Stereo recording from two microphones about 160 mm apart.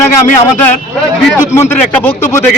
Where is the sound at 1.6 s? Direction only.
15° left (ahead or behind).